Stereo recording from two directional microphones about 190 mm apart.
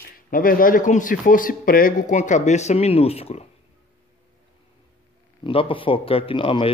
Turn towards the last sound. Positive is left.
turn(degrees=25)  # may be behind; listen again after turning